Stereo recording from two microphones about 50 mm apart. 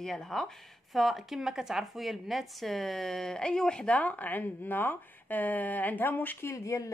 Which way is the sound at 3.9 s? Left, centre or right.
Left.